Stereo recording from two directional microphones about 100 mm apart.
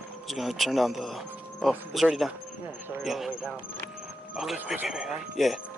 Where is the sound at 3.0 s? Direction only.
Centre (ahead or behind).